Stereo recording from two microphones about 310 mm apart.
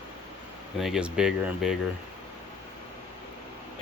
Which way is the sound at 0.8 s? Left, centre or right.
Centre.